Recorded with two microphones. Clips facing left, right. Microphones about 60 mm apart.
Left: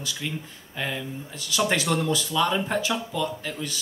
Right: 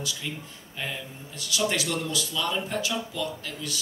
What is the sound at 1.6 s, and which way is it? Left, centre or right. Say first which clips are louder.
Speech: left 4 dB; left.